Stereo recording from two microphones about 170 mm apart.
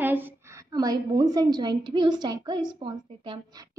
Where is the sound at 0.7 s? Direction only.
20° right (ahead or behind).